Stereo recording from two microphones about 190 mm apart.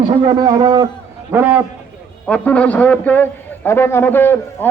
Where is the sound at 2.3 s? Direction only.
5° left (ahead or behind).